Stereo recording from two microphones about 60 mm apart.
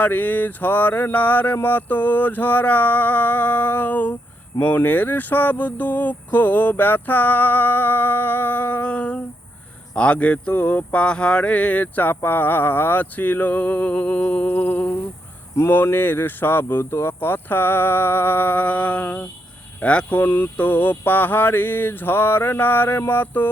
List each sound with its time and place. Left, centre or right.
0.0 s speech: left
11.0 s speech: centre
15.7 s speech: left; by 20.1 s centre
20.1 s speech: left